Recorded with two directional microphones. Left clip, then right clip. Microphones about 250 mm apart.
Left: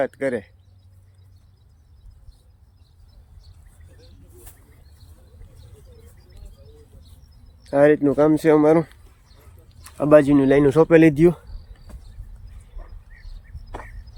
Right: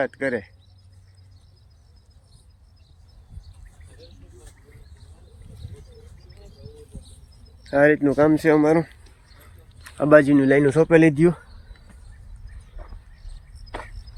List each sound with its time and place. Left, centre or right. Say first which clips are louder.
0.0 s speech: left 1 dB; centre
7.6 s speech: left 1 dB; centre